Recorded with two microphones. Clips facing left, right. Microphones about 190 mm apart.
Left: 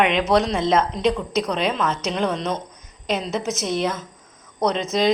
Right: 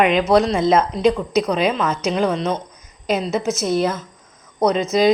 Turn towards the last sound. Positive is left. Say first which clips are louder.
# right 4 dB
turn(degrees=-5)  # may be behind; listen again after turning